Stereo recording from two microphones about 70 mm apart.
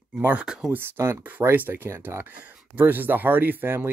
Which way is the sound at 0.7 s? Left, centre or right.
Right.